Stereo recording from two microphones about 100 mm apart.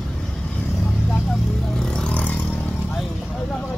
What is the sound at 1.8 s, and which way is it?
Vehicle, 10° left (ahead or behind).